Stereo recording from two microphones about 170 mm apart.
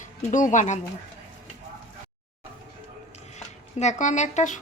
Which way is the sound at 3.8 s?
45° left (ahead or behind).